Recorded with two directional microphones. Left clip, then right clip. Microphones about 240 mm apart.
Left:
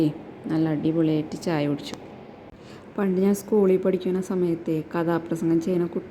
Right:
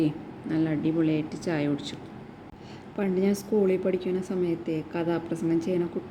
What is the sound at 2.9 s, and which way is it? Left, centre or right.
A woman's voice, centre.